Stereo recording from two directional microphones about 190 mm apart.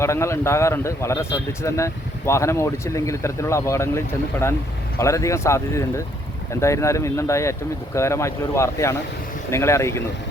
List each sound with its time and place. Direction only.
0.0 s speech: 15° left (ahead or behind)